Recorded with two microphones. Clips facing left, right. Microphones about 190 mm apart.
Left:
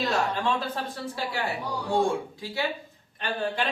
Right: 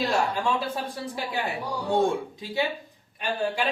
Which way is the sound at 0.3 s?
10° right (ahead or behind).